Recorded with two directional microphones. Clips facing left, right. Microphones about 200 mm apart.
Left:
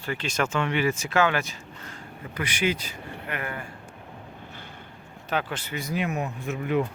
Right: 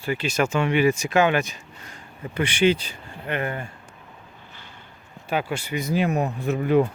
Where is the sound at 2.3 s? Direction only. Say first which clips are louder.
Right 7 dB; 30° right (ahead or behind).